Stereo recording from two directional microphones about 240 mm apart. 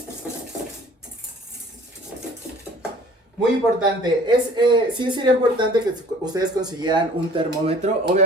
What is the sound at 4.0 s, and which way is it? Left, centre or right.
Speech, centre.